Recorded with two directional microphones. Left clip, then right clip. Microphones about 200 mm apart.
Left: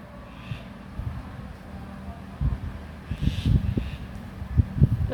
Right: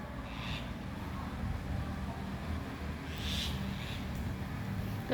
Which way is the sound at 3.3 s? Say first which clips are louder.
Left 2 dB; 15° left (ahead or behind).